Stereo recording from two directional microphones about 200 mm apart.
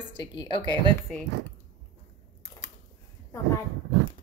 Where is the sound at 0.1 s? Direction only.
20° left (ahead or behind).